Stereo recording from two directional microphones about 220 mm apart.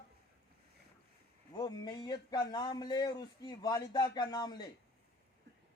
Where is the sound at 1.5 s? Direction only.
20° left (ahead or behind).